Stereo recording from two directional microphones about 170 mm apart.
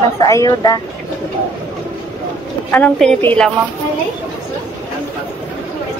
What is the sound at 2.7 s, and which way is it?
Speech, 5° left (ahead or behind).